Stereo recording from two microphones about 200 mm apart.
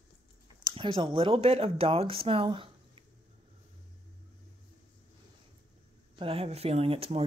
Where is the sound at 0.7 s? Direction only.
25° right (ahead or behind).